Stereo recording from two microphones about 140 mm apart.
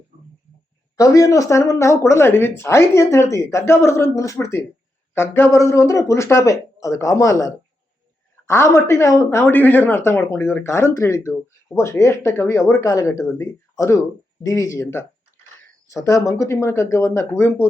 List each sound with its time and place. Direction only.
0.9 s speech: 25° left (ahead or behind)